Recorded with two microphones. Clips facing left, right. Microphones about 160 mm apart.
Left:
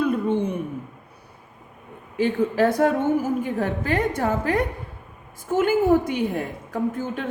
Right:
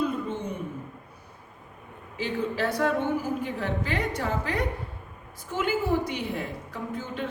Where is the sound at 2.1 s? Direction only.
50° left (ahead or behind).